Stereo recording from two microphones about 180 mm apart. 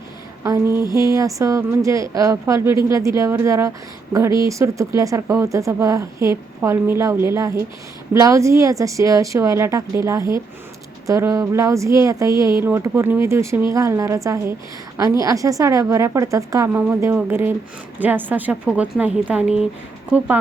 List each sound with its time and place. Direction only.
0.4 s a woman's voice: 15° right (ahead or behind)